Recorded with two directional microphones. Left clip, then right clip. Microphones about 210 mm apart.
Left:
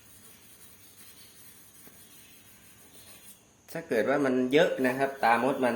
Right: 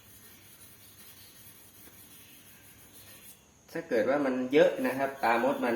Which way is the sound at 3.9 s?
50° left (ahead or behind).